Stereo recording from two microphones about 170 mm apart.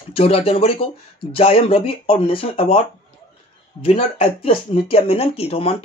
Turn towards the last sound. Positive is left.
turn(degrees=35)  # may be behind; listen again after turning